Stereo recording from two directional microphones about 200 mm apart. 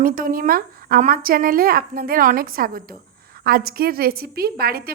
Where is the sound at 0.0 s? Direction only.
45° right (ahead or behind).